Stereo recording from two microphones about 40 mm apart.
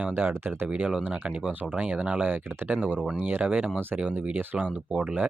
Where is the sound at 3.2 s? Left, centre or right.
Right.